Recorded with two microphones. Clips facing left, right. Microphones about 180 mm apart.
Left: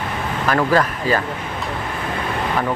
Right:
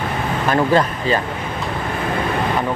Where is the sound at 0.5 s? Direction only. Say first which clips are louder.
Right 1 dB; 25° right (ahead or behind).